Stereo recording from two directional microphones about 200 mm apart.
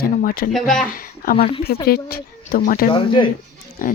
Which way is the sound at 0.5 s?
Centre (ahead or behind).